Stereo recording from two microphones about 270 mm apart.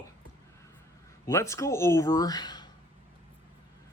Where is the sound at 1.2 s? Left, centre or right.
Centre.